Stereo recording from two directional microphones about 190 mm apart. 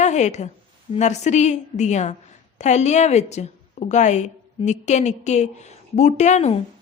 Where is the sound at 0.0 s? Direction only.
40° left (ahead or behind).